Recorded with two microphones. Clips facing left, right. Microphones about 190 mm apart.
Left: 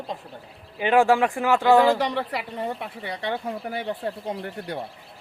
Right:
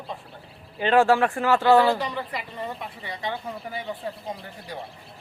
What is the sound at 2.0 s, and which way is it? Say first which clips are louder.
Speech: left 4 dB; 70° left (ahead or behind).